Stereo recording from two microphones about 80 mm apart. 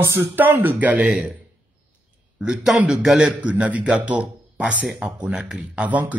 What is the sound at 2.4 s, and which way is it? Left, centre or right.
Speech, centre.